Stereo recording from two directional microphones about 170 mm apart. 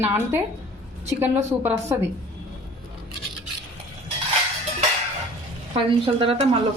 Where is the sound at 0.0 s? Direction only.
10° right (ahead or behind).